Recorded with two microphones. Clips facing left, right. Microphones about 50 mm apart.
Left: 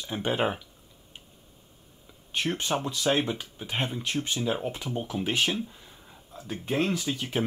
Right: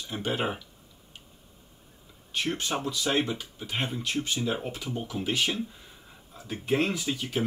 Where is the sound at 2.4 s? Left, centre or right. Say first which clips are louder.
Left 2 dB; left.